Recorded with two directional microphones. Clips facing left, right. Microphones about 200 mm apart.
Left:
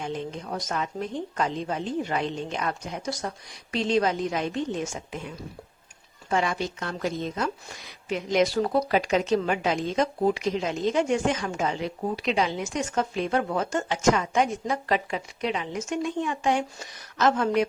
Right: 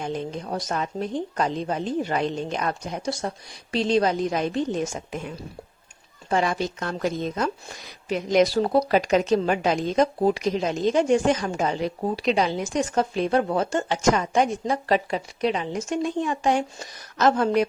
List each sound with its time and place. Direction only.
0.0 s a woman's voice: 40° right (ahead or behind)
6.3 s a woman's voice: 35° right (ahead or behind)